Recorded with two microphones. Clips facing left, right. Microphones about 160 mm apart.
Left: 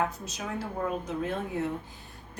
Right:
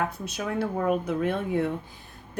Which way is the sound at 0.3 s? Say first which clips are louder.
Right 6 dB; 65° right (ahead or behind).